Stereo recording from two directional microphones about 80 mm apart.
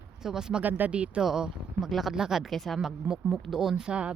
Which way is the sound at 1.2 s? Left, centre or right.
Centre.